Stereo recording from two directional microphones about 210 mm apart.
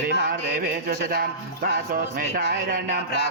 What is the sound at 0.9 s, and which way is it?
Speech, 45° right (ahead or behind).